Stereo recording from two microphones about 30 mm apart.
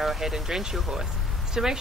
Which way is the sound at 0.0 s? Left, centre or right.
Centre.